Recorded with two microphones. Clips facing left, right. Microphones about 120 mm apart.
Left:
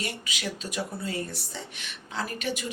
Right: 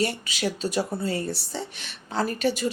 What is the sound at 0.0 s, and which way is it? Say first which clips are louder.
Speech: right 8 dB; 35° right (ahead or behind).